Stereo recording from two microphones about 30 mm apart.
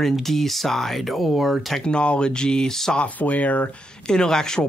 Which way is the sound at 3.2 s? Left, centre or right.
Left.